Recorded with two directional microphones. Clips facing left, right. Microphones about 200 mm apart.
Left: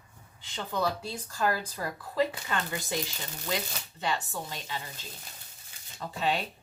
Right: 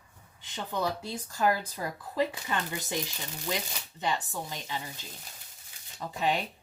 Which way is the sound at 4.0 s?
15° right (ahead or behind).